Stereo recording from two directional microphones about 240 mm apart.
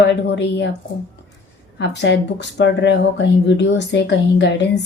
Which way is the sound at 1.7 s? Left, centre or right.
Left.